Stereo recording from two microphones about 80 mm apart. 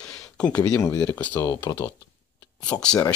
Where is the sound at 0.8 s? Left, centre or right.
Left.